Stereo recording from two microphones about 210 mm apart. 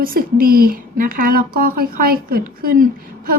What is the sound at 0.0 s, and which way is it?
A woman's voice, 45° right (ahead or behind).